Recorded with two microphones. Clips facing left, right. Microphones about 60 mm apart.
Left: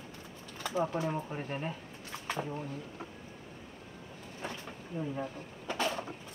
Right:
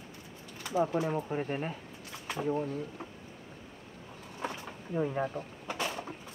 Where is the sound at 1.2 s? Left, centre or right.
Centre.